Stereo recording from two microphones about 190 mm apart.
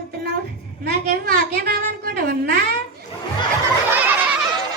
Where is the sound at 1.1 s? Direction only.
50° right (ahead or behind).